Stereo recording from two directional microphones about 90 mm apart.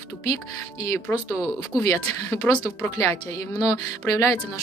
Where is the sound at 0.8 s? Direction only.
35° left (ahead or behind).